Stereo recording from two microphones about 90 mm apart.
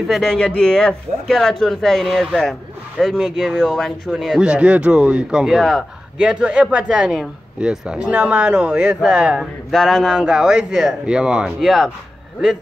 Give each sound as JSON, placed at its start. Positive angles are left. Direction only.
{"t": 0.1, "sound": "speech", "side_deg": 5}
{"t": 9.7, "sound": "speech", "side_deg": 0}